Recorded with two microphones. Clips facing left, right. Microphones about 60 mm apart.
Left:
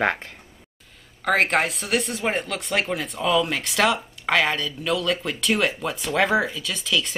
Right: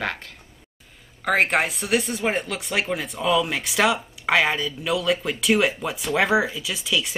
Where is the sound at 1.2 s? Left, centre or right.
Centre.